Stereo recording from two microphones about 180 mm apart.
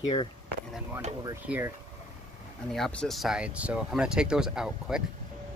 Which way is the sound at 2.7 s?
5° left (ahead or behind).